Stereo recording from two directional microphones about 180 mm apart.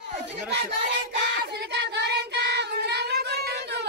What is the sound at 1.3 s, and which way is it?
Child singing, 70° right (ahead or behind).